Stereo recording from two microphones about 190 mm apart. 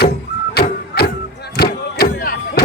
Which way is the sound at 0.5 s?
55° left (ahead or behind).